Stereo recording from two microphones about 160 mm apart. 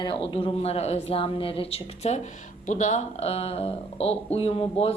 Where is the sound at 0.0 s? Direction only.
30° left (ahead or behind).